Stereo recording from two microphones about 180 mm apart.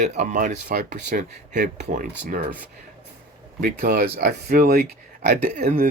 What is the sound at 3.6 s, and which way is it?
Speech, 55° right (ahead or behind).